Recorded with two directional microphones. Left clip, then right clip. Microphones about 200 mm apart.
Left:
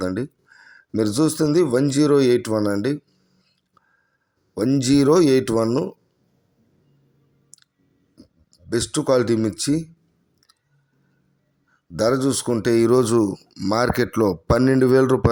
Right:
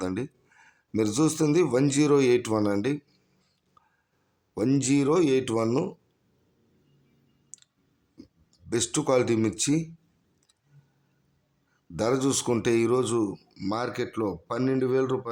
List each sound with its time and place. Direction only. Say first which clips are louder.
0.0 s speech: left 6 dB; 15° left (ahead or behind)
4.5 s speech: left 6 dB; 15° left (ahead or behind)
5.5 s speech: left 6 dB; 10° left (ahead or behind)
7.5 s clicking: right 1 dB; 15° left (ahead or behind)
8.1 s speech: left 1 dB; 5° left (ahead or behind)
11.9 s speech: left 6 dB; 15° left (ahead or behind)
12.7 s speech: left 10 dB; 20° left (ahead or behind)
13.7 s speech: left 10 dB; 30° left (ahead or behind)